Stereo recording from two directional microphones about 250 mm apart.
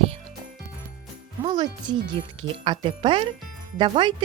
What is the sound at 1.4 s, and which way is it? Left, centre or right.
Speech, centre.